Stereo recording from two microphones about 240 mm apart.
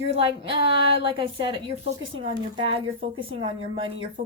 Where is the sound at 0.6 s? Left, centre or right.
Left.